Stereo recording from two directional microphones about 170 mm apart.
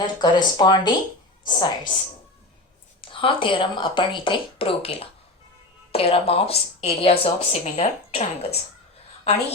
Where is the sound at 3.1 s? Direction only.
30° left (ahead or behind).